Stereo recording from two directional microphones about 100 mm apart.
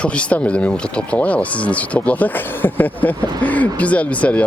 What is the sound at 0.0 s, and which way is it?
Speech, 10° left (ahead or behind).